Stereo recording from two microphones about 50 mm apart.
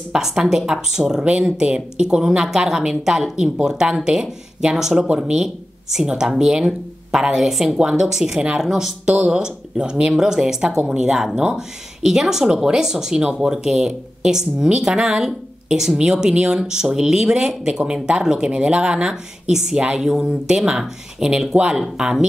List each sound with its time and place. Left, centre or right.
0.1 s speech: centre
3.5 s speech: centre
9.0 s speech: centre